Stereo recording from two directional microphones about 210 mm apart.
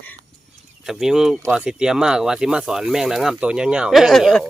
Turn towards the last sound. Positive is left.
turn(degrees=0)  # may be behind; listen again after turning